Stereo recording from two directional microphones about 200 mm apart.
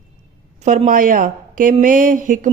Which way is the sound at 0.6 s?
35° right (ahead or behind).